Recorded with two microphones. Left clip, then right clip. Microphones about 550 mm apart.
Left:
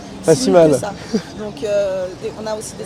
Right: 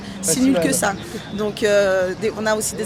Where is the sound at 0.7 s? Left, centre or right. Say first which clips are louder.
Left 3 dB; right.